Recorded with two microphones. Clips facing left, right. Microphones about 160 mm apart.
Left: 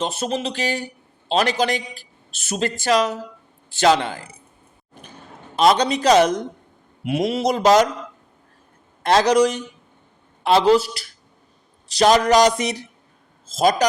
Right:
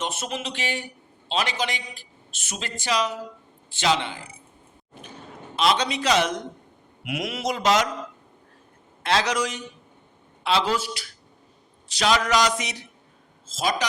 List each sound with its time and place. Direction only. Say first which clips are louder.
0.0 s a man's voice: left 6 dB; 35° left (ahead or behind)
5.5 s a man's voice: left 6 dB; 40° left (ahead or behind)
9.0 s a man's voice: left 8 dB; 40° left (ahead or behind)